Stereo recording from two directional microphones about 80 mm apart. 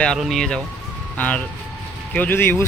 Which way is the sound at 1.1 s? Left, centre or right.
Centre.